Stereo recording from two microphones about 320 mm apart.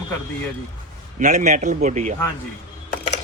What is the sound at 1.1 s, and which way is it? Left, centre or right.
Speech, right.